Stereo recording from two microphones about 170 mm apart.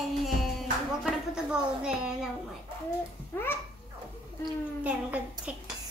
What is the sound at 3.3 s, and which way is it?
Speech, 10° left (ahead or behind).